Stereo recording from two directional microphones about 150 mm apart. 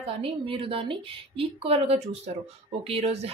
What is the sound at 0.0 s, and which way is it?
A woman's voice, 35° right (ahead or behind).